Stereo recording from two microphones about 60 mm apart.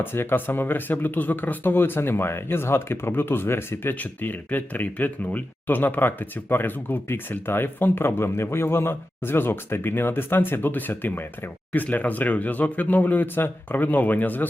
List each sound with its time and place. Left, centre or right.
0.0 s speech: left
3.9 s speech: left